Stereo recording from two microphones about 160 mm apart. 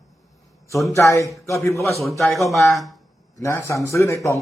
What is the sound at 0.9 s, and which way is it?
Speech, 20° left (ahead or behind).